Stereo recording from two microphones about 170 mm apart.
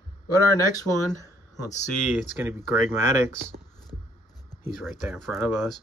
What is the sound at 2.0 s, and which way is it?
Speech, 5° left (ahead or behind).